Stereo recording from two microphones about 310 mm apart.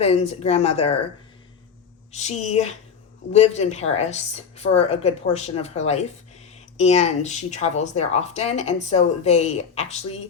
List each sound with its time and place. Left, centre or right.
0.0 s speech: left
2.1 s speech: left